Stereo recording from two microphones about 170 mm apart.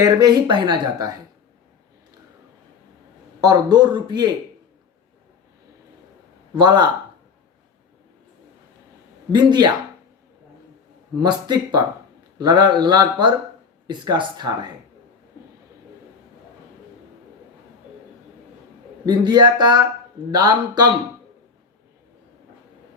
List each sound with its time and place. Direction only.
0.0 s speech: 25° right (ahead or behind)
3.4 s speech: 25° right (ahead or behind)
6.6 s speech: 25° right (ahead or behind)
9.3 s speech: 25° right (ahead or behind)
11.2 s speech: 25° right (ahead or behind)
19.0 s speech: 25° right (ahead or behind)